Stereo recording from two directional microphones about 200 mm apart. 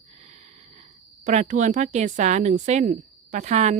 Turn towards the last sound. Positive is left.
turn(degrees=-35)  # may be behind; listen again after turning